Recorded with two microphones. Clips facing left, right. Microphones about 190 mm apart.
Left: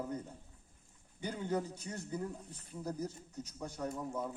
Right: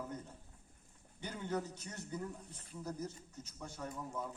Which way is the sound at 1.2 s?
10° left (ahead or behind).